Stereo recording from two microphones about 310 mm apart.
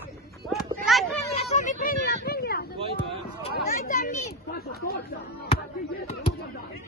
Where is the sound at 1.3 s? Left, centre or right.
Left.